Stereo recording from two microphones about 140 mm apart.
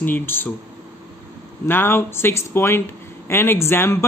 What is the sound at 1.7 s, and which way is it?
Speech, 15° left (ahead or behind).